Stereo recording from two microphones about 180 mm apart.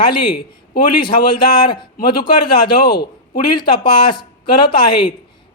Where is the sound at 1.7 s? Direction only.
25° left (ahead or behind).